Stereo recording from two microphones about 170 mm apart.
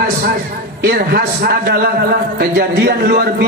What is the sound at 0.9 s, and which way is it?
A man's voice, 60° right (ahead or behind).